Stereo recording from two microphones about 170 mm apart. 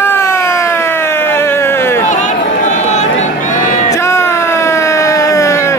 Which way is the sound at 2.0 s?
45° left (ahead or behind).